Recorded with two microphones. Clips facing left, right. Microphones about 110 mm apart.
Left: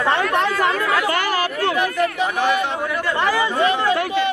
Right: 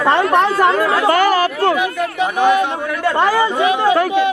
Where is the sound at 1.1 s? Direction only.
45° right (ahead or behind).